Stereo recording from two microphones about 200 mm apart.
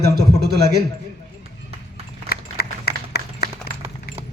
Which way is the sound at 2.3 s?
55° left (ahead or behind).